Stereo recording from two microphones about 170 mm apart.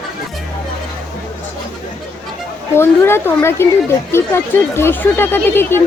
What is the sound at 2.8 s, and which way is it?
Speech, 15° left (ahead or behind).